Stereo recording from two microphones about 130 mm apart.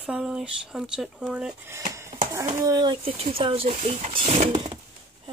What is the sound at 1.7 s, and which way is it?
Speech, 25° right (ahead or behind).